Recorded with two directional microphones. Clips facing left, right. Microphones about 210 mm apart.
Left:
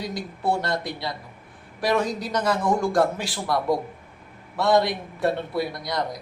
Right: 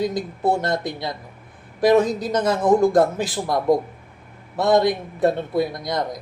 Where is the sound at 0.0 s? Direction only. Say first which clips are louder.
Right 6 dB; 20° right (ahead or behind).